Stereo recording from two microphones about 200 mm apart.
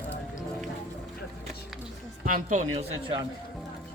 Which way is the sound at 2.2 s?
40° right (ahead or behind).